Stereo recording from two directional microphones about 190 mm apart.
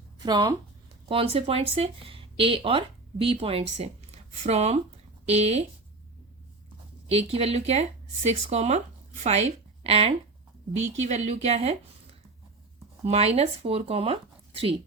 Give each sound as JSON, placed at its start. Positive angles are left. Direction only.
{"t": 0.2, "sound": "a woman's voice", "side_deg": -20}
{"t": 7.1, "sound": "speech", "side_deg": -30}
{"t": 13.1, "sound": "speech", "side_deg": -35}